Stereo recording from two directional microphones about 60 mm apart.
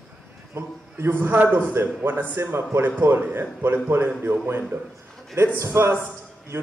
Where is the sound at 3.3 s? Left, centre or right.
Right.